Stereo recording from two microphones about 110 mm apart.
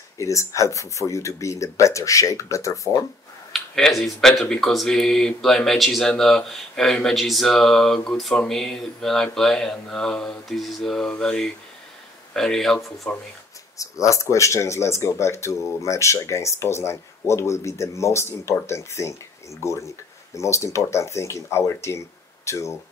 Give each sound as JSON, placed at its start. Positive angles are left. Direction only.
{"t": 0.2, "sound": "speech", "side_deg": 30}
{"t": 3.5, "sound": "speech", "side_deg": 5}
{"t": 13.7, "sound": "speech", "side_deg": 30}